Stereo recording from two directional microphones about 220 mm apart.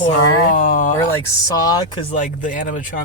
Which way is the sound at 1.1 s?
15° left (ahead or behind).